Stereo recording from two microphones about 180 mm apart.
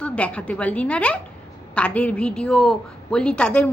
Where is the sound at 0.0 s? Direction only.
5° left (ahead or behind).